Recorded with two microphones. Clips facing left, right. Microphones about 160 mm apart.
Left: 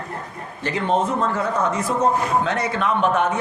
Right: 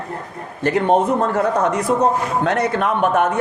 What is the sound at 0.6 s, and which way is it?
A man's voice, 55° right (ahead or behind).